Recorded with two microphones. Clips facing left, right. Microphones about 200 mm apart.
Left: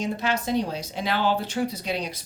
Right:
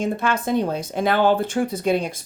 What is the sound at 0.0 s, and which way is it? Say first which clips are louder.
Speech: right 4 dB; 50° right (ahead or behind).